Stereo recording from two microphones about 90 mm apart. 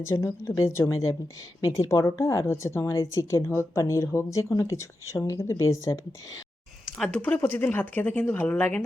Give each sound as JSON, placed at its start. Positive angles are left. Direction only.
{"t": 0.0, "sound": "speech", "side_deg": 30}
{"t": 6.9, "sound": "speech", "side_deg": 10}